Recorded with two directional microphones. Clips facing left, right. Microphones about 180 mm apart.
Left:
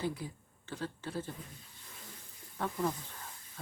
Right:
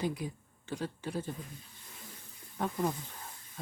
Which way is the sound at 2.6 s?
15° right (ahead or behind).